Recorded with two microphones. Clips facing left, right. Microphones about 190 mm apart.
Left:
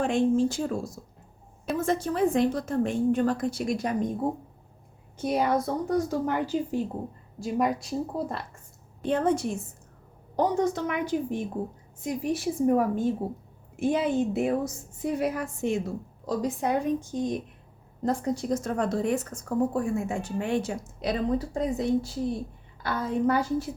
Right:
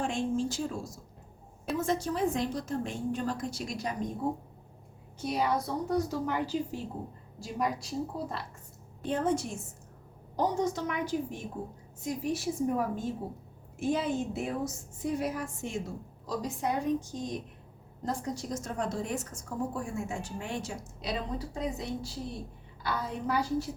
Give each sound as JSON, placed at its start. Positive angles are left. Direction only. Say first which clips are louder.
{"t": 0.0, "sound": "a woman's voice", "louder": "left 7 dB", "side_deg": 60}
{"t": 5.2, "sound": "a woman's voice", "louder": "left 5 dB", "side_deg": 50}
{"t": 9.0, "sound": "a woman's voice", "louder": "left 5 dB", "side_deg": 65}